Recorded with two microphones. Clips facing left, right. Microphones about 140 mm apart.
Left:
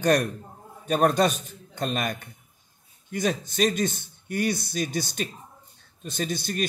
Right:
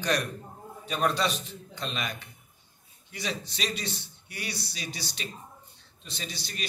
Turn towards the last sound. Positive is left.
turn(degrees=50)  # may be behind; listen again after turning